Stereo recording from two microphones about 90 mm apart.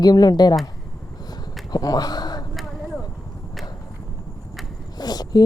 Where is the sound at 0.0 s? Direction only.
50° left (ahead or behind).